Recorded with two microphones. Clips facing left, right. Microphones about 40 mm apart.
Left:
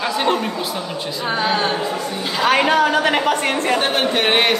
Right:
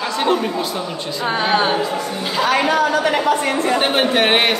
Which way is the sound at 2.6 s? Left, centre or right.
Left.